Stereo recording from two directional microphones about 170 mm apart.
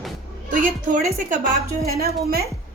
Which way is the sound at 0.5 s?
50° right (ahead or behind).